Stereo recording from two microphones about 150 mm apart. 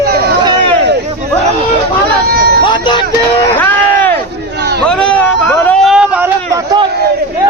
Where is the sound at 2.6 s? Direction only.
30° left (ahead or behind).